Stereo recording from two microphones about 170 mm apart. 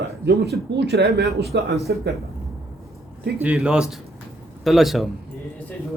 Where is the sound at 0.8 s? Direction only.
80° right.